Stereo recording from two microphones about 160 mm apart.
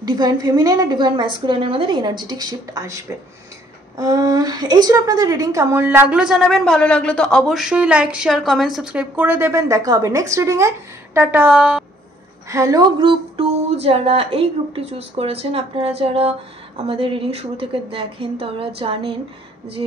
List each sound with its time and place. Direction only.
0.0 s a woman's voice: 25° right (ahead or behind); by 11.8 s 10° right (ahead or behind)
12.4 s speech: 20° right (ahead or behind)